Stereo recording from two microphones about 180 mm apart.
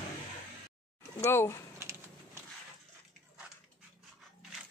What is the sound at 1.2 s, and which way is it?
Speech, 15° left (ahead or behind).